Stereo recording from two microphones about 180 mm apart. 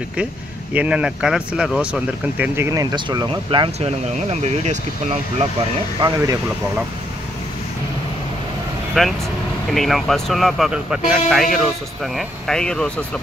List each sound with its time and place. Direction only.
0.7 s speech: 5° right (ahead or behind); by 4.7 s 40° right (ahead or behind)
5.9 s speech: 20° right (ahead or behind)
9.0 s speech: centre (ahead or behind)